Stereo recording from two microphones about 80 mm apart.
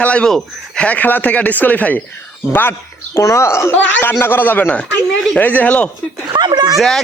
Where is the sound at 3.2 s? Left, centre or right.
Left; by 5.9 s centre.